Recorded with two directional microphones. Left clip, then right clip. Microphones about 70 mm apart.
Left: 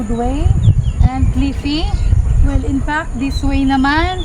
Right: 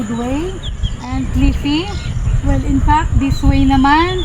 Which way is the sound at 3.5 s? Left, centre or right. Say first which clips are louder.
Right 3 dB; left.